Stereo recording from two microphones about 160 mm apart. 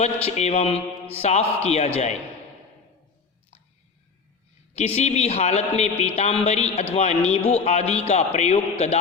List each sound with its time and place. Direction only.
0.0 s speech: 45° left (ahead or behind)
4.9 s speech: 40° left (ahead or behind)